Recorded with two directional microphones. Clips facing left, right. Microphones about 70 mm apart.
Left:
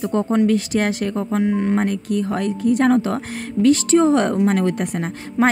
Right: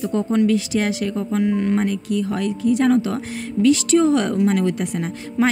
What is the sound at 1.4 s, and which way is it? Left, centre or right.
Speech, left.